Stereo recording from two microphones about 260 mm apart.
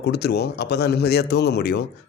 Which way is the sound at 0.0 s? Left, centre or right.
Left.